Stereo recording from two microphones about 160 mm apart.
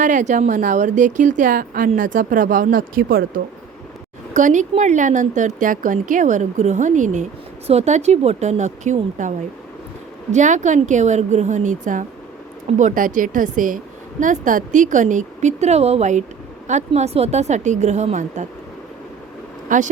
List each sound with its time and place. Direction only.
0.0 s speech: 50° right (ahead or behind)
4.4 s speech: 50° right (ahead or behind)
10.3 s speech: 50° right (ahead or behind)
19.6 s speech: 55° right (ahead or behind)